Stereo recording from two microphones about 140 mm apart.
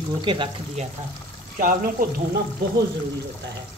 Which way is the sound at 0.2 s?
35° right (ahead or behind).